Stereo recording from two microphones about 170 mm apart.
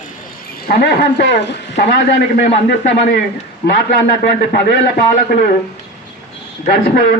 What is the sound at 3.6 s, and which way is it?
Speech, 70° left (ahead or behind).